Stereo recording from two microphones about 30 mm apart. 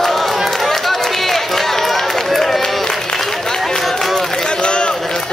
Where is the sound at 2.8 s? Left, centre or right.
Centre.